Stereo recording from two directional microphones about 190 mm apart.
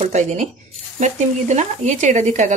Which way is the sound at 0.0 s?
35° right (ahead or behind).